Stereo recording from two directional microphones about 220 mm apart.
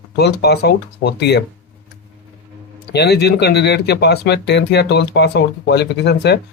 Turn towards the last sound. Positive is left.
turn(degrees=50)  # may be behind; listen again after turning